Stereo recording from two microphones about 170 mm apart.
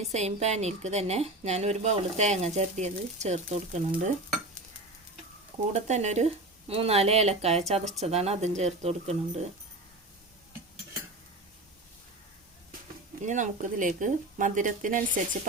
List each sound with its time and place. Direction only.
0.1 s speech: 40° right (ahead or behind)
5.7 s speech: 40° right (ahead or behind)
13.2 s speech: 45° right (ahead or behind)